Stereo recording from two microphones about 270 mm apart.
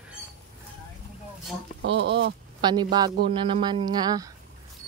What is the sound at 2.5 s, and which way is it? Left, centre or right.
A man's voice, centre.